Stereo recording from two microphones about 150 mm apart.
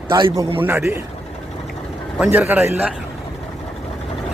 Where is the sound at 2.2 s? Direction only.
15° right (ahead or behind).